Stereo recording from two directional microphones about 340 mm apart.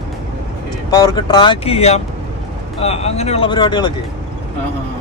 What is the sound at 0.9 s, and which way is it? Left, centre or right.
Speech, centre.